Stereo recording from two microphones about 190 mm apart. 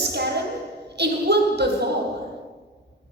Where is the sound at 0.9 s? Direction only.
60° right (ahead or behind).